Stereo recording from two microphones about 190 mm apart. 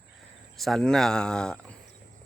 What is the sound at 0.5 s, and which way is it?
Speech, centre (ahead or behind).